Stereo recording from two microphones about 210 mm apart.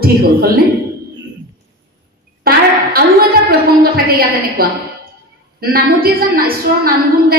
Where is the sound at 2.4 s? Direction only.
45° right (ahead or behind).